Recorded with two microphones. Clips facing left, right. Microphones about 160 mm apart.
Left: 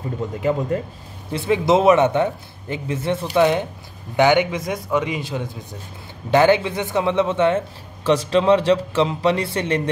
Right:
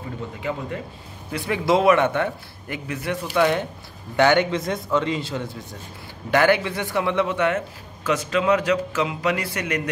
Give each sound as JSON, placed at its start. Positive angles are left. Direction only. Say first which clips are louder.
{"t": 0.4, "sound": "speech", "louder": "left 8 dB", "side_deg": 45}
{"t": 1.3, "sound": "a man's voice", "louder": "left 4 dB", "side_deg": 20}